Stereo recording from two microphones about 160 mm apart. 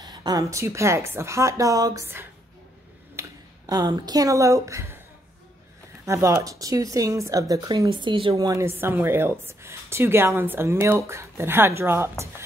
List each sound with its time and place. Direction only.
0.0 s speech: 25° right (ahead or behind)
6.0 s speech: 20° right (ahead or behind)
8.4 s a woman's voice: 20° right (ahead or behind)